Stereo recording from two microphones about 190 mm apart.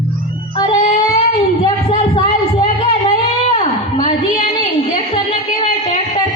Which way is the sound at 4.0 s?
30° left (ahead or behind).